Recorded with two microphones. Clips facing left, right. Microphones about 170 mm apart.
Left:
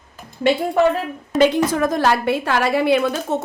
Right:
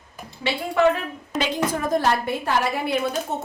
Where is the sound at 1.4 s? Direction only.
75° left (ahead or behind).